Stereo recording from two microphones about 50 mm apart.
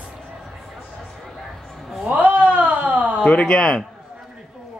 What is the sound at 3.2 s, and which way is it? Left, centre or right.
Speech, left.